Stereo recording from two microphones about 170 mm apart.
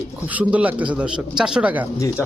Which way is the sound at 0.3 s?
10° right (ahead or behind).